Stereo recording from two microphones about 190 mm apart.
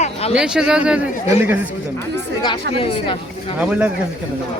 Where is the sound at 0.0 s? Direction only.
30° left (ahead or behind).